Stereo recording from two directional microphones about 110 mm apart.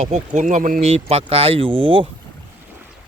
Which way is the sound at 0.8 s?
70° right (ahead or behind).